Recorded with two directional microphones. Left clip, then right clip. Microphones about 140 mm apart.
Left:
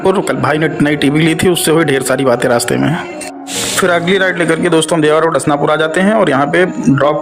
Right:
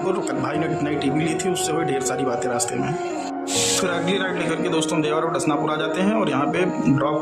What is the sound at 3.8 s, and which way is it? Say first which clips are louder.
Speech: left 11 dB; 40° left (ahead or behind).